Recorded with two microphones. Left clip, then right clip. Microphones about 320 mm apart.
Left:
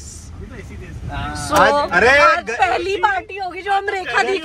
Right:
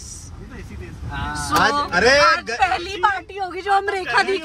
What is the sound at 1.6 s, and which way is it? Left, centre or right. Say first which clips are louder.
Speech: left 5 dB; centre.